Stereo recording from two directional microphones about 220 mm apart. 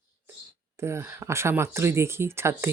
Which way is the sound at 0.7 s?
10° right (ahead or behind).